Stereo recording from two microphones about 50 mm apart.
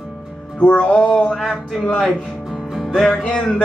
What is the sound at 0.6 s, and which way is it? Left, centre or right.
Speech, left.